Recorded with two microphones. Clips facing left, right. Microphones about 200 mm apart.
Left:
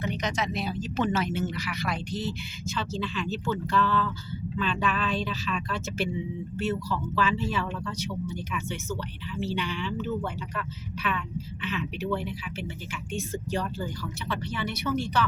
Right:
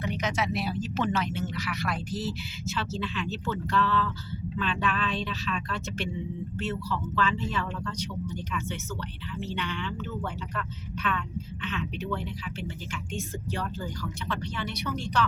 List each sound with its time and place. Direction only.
0.0 s speech: 5° right (ahead or behind)